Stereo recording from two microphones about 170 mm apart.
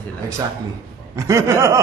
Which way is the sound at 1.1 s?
20° right (ahead or behind).